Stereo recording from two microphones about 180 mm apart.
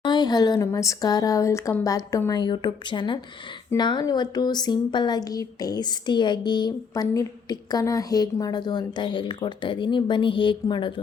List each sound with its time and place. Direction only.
0.0 s a woman's voice: 25° left (ahead or behind)